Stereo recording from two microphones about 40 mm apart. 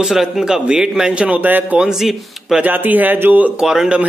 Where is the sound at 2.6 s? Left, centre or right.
Right.